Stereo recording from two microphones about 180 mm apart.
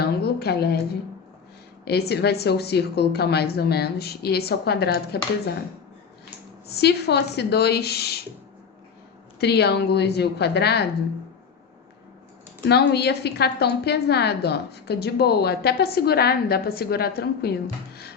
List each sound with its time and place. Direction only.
0.0 s a sound: 60° left (ahead or behind)
1.8 s a woman's voice: 65° left (ahead or behind)
6.7 s a woman's voice: 65° left (ahead or behind)
9.4 s a woman's voice: 65° left (ahead or behind)
12.6 s a woman's voice: 65° left (ahead or behind)